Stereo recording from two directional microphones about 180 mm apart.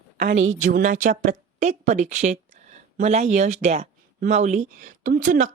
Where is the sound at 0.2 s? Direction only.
80° right.